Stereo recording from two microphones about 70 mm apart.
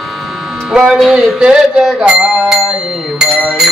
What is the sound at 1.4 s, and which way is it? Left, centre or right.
Bicycle bell, centre.